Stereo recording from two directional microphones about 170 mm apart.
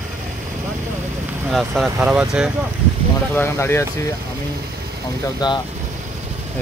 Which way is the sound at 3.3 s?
15° left (ahead or behind).